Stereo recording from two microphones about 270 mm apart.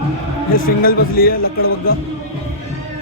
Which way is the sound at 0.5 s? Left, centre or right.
Left.